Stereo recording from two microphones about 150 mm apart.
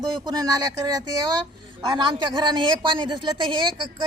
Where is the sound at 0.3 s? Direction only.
25° right (ahead or behind).